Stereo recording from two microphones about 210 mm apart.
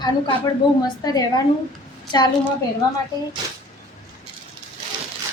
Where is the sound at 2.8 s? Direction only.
20° left (ahead or behind).